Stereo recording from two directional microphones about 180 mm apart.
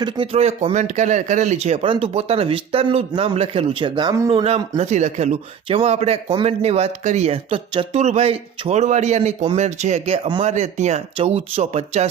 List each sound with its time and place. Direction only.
0.0 s speech: 30° right (ahead or behind)
4.3 s speech: 30° right (ahead or behind)